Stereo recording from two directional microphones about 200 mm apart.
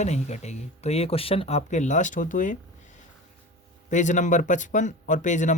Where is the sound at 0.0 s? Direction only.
35° left (ahead or behind).